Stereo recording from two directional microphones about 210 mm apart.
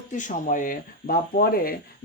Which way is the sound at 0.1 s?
40° left (ahead or behind).